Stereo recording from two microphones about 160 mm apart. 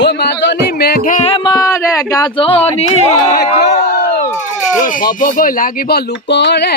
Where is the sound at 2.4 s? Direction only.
35° left (ahead or behind).